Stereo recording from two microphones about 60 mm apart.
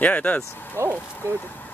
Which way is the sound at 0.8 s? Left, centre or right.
Right.